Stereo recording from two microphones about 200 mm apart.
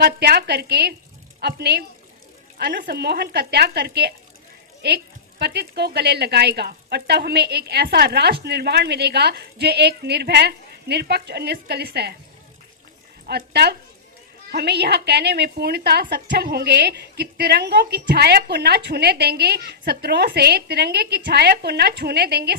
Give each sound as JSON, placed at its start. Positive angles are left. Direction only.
{"t": 0.0, "sound": "a woman's voice", "side_deg": -55}
{"t": 13.2, "sound": "a woman's voice", "side_deg": -55}